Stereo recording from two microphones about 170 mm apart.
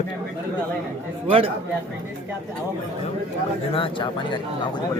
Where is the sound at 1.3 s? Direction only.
35° right (ahead or behind).